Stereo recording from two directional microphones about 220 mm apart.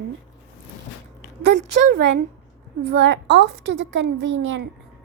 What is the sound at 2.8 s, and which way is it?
A child's voice, 50° right (ahead or behind).